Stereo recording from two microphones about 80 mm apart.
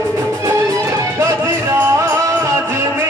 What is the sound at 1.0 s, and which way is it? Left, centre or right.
Music, right.